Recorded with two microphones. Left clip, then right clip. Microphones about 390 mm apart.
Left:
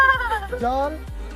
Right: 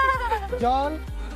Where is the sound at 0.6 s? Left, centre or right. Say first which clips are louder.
Right 1 dB; left.